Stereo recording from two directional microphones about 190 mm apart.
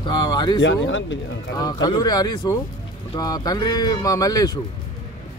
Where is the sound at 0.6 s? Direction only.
85° left.